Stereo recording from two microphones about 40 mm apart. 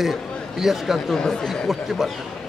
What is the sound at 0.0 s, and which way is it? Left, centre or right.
Speech, centre.